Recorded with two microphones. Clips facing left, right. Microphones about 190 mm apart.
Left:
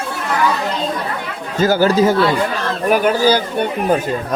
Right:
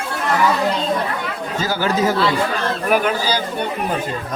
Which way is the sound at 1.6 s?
45° left (ahead or behind).